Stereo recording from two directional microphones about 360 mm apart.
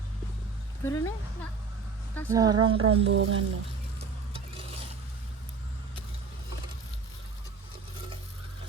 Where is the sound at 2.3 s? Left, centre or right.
Centre.